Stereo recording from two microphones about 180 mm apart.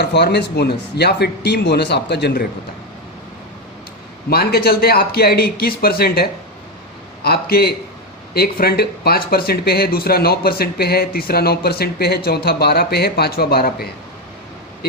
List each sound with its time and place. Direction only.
0.0 s speech: 65° left (ahead or behind)
4.3 s speech: 60° left (ahead or behind)
7.3 s speech: 60° left (ahead or behind)